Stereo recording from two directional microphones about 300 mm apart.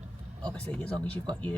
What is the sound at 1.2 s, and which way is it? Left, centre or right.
Speech, centre.